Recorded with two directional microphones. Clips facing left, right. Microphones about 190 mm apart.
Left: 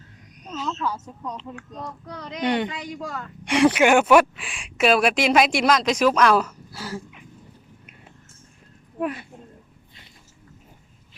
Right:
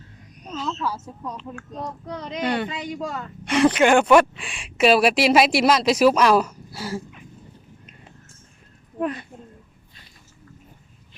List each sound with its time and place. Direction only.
0.7 s speech: 5° right (ahead or behind)
1.8 s speech: 20° right (ahead or behind)
2.4 s speech: 20° left (ahead or behind)
2.6 s speech: 25° right (ahead or behind)
3.4 s speech: 10° left (ahead or behind); by 7.0 s 10° right (ahead or behind)
9.0 s speech: 5° left (ahead or behind)